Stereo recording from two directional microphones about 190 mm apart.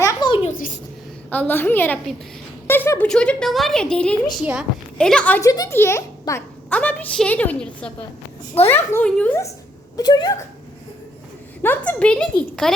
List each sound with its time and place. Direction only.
0.0 s a sound: 20° left (ahead or behind)
1.3 s a child's voice: 10° left (ahead or behind)
10.0 s speech: 20° left (ahead or behind)
11.6 s speech: 10° left (ahead or behind)